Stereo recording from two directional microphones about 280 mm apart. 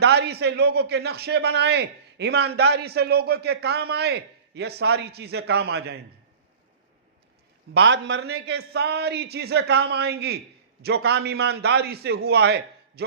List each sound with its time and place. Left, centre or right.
0.0 s a man's voice: right
7.7 s a man's voice: right